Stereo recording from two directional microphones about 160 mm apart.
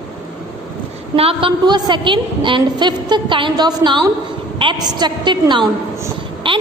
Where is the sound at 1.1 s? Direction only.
35° right (ahead or behind).